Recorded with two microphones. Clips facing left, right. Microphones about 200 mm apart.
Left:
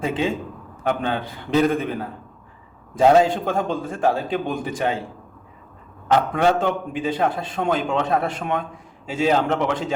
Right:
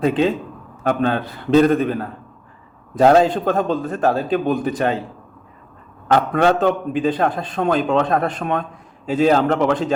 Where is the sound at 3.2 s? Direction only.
10° left (ahead or behind).